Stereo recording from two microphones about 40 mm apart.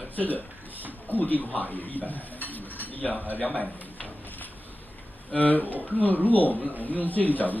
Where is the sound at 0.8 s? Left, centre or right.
Right.